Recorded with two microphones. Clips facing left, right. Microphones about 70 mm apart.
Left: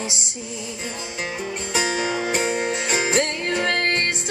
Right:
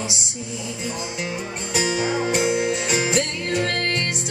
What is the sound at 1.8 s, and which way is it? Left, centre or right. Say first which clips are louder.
Music: right 1 dB; left.